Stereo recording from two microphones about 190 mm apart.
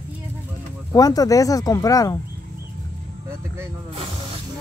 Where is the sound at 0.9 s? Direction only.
20° left (ahead or behind).